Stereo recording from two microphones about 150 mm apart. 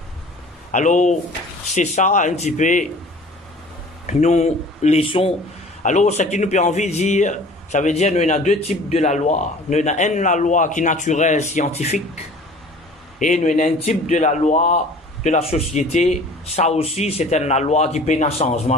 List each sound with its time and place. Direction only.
0.7 s a man's voice: 55° left (ahead or behind)
4.0 s a man's voice: 50° left (ahead or behind)
5.8 s a man's voice: 55° left (ahead or behind)
13.2 s a man's voice: 55° left (ahead or behind)